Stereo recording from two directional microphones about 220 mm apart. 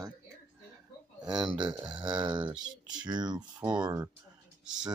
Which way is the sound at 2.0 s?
20° right (ahead or behind).